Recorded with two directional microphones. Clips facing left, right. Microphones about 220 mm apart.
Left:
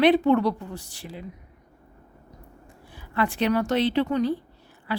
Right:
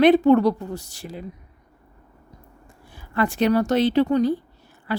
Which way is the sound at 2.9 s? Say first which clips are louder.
Right 3 dB; 45° right (ahead or behind).